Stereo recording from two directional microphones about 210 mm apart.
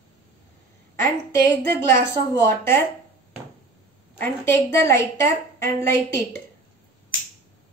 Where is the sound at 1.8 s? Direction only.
10° left (ahead or behind).